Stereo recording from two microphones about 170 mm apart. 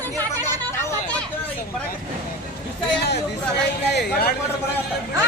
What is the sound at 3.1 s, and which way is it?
Chatter, 75° left (ahead or behind).